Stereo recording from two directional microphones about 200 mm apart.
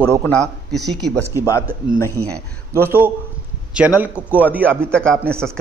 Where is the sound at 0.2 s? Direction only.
5° left (ahead or behind).